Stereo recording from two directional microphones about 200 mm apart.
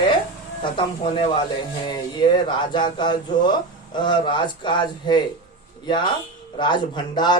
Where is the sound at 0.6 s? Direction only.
25° left (ahead or behind).